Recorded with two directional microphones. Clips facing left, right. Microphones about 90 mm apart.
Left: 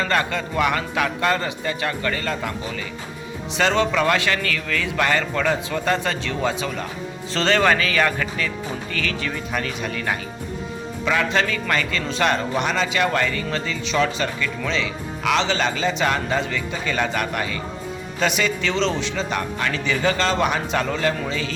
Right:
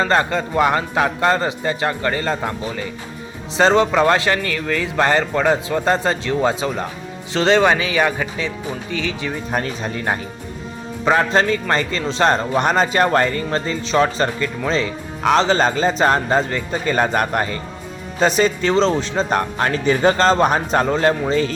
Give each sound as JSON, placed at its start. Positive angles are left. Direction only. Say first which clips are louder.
{"t": 0.0, "sound": "a man's voice", "louder": "right 5 dB", "side_deg": -30}
{"t": 9.5, "sound": "speech", "louder": "right 5 dB", "side_deg": -35}